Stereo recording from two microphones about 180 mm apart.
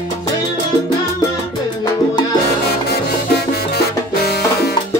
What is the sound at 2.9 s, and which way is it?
Music, 65° left (ahead or behind).